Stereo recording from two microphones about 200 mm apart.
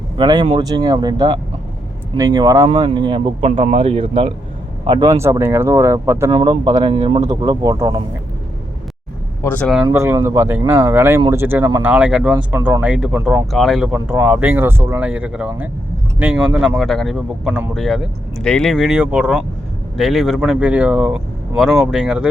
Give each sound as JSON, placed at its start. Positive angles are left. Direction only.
{"t": 0.2, "sound": "speech", "side_deg": -20}
{"t": 6.3, "sound": "speech", "side_deg": -25}
{"t": 6.9, "sound": "speech", "side_deg": -35}
{"t": 7.3, "sound": "speech", "side_deg": -20}
{"t": 9.4, "sound": "speech", "side_deg": 5}
{"t": 9.8, "sound": "speech", "side_deg": -15}